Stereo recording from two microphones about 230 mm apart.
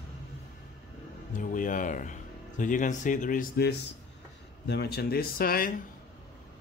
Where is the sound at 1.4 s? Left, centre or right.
Left.